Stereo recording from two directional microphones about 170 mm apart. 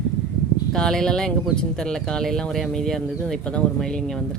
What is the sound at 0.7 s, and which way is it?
Speech, 5° left (ahead or behind).